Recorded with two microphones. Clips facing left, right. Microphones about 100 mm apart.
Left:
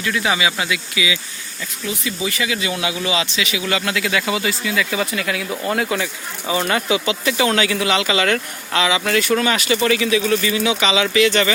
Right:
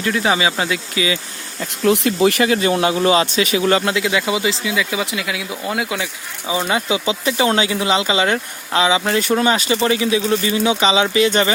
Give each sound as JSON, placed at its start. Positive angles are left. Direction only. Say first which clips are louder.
{"t": 0.0, "sound": "speech", "louder": "right 2 dB", "side_deg": -35}
{"t": 1.8, "sound": "speech", "louder": "right 11 dB", "side_deg": -70}
{"t": 3.9, "sound": "speech", "louder": "right 2 dB", "side_deg": -20}